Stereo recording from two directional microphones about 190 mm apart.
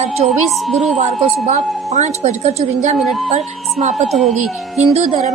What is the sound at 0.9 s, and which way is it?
A woman's voice, 40° right (ahead or behind).